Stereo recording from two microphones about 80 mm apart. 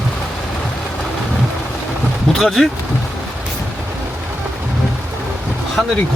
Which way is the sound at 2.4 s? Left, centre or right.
Centre.